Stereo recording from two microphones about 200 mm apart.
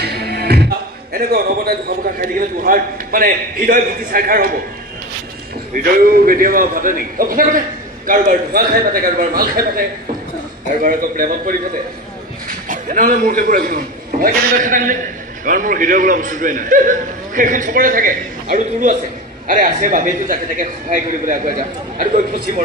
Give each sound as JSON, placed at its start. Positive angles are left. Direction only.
{"t": 0.0, "sound": "speech", "side_deg": -55}
{"t": 5.7, "sound": "a man's voice", "side_deg": -45}